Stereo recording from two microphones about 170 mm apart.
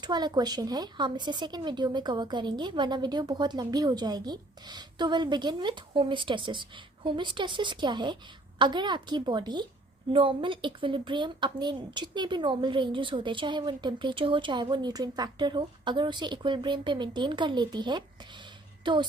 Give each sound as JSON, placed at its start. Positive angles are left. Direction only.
{"t": 0.0, "sound": "speech", "side_deg": -25}